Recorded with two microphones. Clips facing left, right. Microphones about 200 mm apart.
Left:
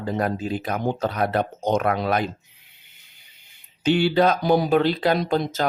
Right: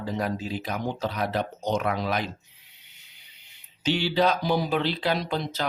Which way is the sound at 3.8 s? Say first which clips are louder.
Left 5 dB; 55° left (ahead or behind).